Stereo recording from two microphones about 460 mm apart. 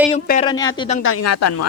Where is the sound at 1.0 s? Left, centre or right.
Left.